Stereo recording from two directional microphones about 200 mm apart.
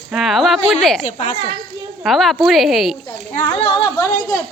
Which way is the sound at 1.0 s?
35° left (ahead or behind).